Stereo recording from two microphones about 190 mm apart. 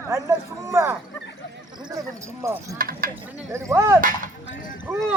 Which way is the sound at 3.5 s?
15° right (ahead or behind).